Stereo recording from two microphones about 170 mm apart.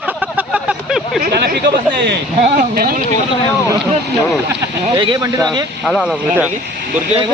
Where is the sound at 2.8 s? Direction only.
60° right (ahead or behind).